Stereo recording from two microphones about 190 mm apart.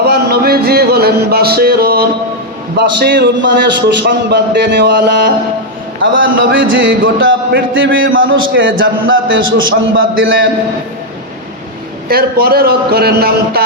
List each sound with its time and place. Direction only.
0.1 s music: 55° right (ahead or behind)
2.7 s a man's voice: 60° right (ahead or behind)
6.0 s a man's voice: 85° right
12.0 s a man's voice: 55° right (ahead or behind)